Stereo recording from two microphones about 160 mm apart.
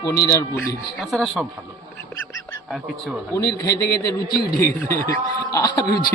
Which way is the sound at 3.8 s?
80° left.